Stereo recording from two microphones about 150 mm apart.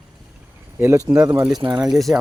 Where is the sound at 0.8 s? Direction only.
20° right (ahead or behind).